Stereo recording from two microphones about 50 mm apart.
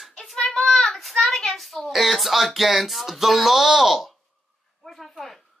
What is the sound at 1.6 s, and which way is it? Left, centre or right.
Speech, centre.